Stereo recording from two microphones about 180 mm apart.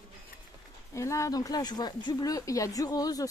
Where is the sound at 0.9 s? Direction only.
15° left (ahead or behind).